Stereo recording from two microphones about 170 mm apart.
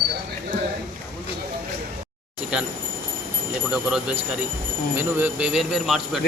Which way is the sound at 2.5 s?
5° right (ahead or behind).